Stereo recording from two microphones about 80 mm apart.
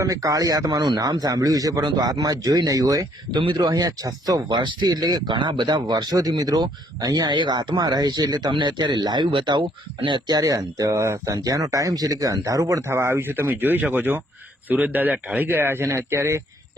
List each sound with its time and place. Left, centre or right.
0.0 s speech: right
1.2 s speech: right
4.5 s speech: right
7.3 s speech: right
11.3 s speech: right
13.2 s speech: right